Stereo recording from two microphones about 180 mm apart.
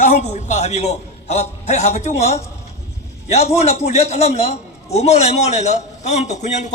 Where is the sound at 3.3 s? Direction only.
35° left (ahead or behind).